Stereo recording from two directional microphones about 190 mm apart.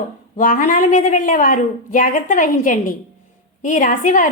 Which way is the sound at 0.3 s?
45° left (ahead or behind).